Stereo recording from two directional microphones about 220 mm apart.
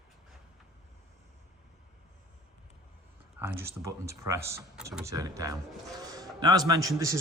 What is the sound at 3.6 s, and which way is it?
Speech, 10° right (ahead or behind).